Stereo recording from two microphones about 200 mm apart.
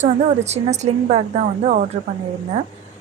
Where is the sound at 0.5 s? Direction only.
35° right (ahead or behind).